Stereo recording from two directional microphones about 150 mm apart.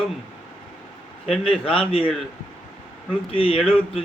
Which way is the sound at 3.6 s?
5° left (ahead or behind).